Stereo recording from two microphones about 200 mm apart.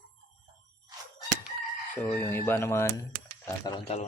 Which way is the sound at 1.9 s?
10° left (ahead or behind).